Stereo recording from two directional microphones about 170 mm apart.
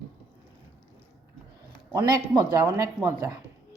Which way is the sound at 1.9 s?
20° right (ahead or behind).